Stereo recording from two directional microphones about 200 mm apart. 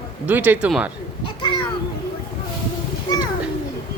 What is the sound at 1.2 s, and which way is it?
Children playing, 25° left (ahead or behind).